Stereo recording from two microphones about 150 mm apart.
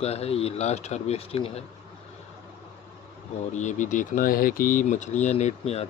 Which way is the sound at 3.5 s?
55° left (ahead or behind).